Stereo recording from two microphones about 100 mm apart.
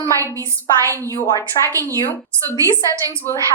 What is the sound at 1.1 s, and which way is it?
Speech, 30° left (ahead or behind).